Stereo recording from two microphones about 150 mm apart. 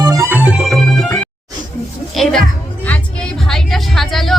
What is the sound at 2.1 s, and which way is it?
Speech, centre (ahead or behind).